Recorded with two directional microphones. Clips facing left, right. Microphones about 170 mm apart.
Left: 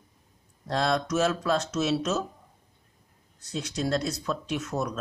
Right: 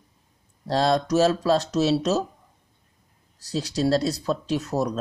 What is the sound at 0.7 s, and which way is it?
Speech, 30° right (ahead or behind).